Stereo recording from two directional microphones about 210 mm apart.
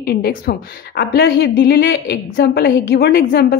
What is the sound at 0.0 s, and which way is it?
A woman's voice, 45° left (ahead or behind).